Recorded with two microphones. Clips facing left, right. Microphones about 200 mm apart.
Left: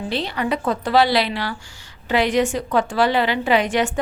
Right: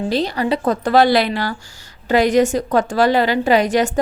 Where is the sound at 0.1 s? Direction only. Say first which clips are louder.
Right 3 dB; 40° right (ahead or behind).